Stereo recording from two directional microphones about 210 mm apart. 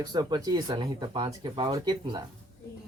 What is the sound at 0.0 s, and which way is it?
Speech, 20° right (ahead or behind).